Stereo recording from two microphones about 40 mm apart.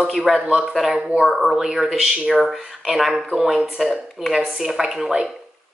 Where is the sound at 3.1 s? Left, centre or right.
Centre.